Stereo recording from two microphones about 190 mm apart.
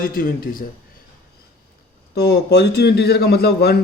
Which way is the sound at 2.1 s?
55° left (ahead or behind).